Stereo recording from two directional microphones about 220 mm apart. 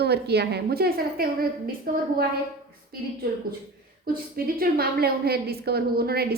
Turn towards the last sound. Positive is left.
turn(degrees=-45)  # may be behind; listen again after turning